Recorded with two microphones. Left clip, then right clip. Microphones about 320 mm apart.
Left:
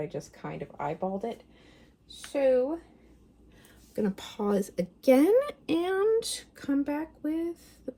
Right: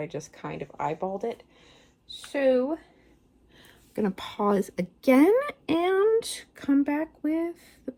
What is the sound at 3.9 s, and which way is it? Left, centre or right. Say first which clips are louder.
Speech: right 3 dB; centre.